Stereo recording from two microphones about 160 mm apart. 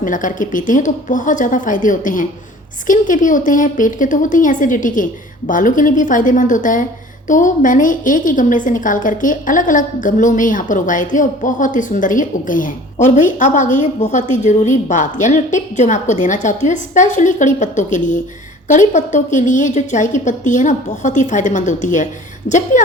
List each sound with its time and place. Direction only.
0.0 s a woman's voice: 55° left (ahead or behind)